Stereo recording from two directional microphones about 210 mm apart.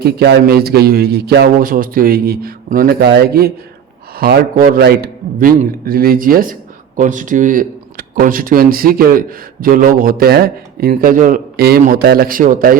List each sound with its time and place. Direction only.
0.0 s a man's voice: 50° right (ahead or behind)